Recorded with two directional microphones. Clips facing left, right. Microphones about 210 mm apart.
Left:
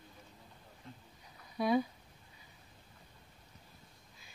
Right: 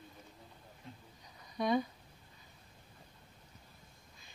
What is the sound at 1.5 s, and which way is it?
Speech, 5° left (ahead or behind).